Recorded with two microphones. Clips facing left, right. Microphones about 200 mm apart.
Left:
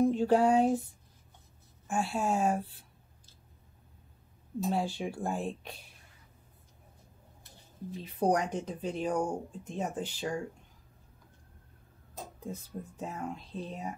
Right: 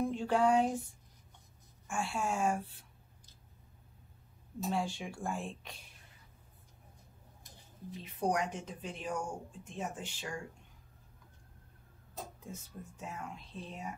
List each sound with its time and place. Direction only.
0.0 s a sound: 40° left (ahead or behind)
1.9 s speech: 35° left (ahead or behind)
4.7 s speech: 35° left (ahead or behind)
8.0 s speech: 35° left (ahead or behind)
12.4 s speech: 35° left (ahead or behind)